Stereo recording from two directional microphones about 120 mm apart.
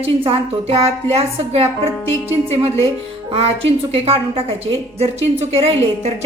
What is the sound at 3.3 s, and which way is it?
A woman's voice, 55° right (ahead or behind).